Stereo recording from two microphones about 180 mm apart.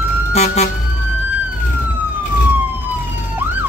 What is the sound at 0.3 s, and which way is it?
Vehicle, 35° left (ahead or behind).